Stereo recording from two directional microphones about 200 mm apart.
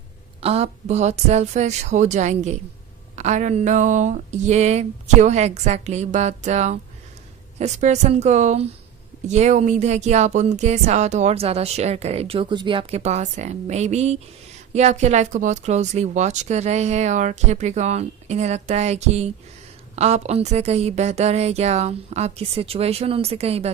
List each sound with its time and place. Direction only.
0.4 s speech: 30° right (ahead or behind)